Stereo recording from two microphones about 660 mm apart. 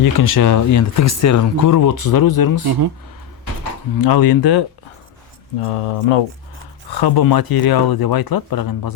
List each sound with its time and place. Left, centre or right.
0.0 s speech: left
2.6 s speech: right
3.9 s speech: left
5.5 s speech: left
6.9 s speech: left